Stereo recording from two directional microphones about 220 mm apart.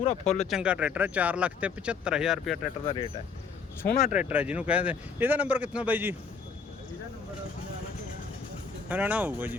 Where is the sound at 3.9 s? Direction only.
40° left (ahead or behind).